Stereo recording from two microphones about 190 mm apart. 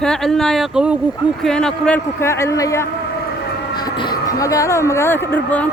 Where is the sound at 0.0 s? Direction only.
Centre (ahead or behind).